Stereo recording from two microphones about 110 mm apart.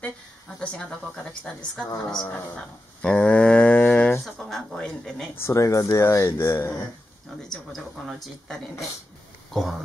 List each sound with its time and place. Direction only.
0.6 s a woman's voice: 10° left (ahead or behind)
5.4 s speech: 30° left (ahead or behind)
7.4 s a sound: 5° left (ahead or behind)
9.5 s speech: centre (ahead or behind)